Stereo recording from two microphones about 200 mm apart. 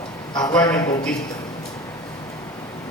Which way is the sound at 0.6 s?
20° left (ahead or behind).